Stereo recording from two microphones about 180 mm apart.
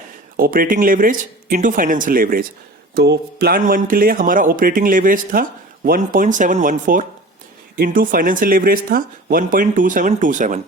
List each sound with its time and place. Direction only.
0.3 s a man's voice: 55° right (ahead or behind)
2.9 s a man's voice: 65° right (ahead or behind); by 10.6 s 45° right (ahead or behind)